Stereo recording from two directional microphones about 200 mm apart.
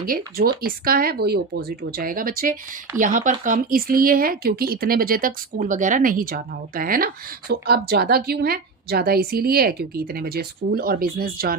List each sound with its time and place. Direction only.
0.0 s speech: 45° right (ahead or behind)